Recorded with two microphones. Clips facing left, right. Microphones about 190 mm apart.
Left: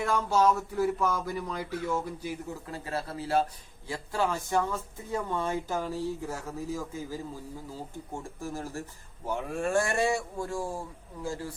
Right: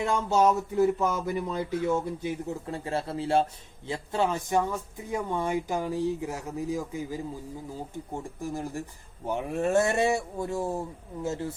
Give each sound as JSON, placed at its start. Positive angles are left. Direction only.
{"t": 0.0, "sound": "speech", "side_deg": -25}